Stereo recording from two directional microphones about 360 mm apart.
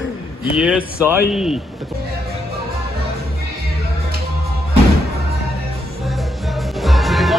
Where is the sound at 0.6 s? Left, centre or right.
Centre.